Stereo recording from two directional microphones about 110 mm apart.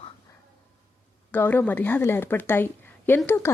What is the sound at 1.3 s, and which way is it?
A woman's voice, 20° left (ahead or behind).